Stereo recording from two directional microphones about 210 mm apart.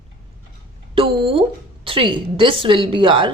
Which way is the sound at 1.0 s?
25° right (ahead or behind).